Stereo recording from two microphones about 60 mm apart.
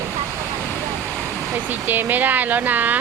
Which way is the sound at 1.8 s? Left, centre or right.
Right.